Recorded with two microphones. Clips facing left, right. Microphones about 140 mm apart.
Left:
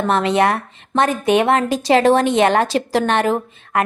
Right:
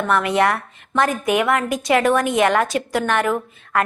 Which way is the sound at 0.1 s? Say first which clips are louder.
Left 2 dB; 25° left (ahead or behind).